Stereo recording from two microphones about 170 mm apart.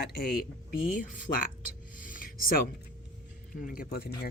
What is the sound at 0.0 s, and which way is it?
Speech, 65° left (ahead or behind).